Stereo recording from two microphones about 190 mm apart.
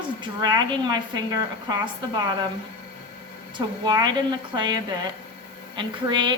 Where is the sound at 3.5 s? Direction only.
20° right (ahead or behind).